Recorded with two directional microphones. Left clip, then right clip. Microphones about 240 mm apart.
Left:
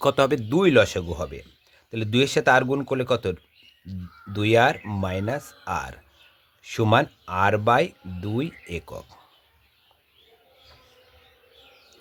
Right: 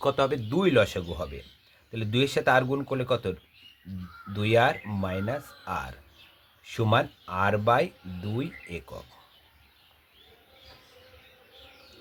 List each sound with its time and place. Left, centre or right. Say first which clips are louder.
0.0 s speech: left 5 dB; left